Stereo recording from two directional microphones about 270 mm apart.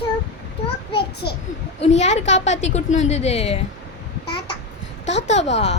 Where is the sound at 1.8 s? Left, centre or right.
Left.